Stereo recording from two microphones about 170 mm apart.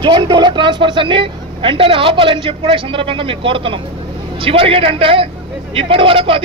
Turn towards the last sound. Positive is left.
turn(degrees=-30)  # may be behind; listen again after turning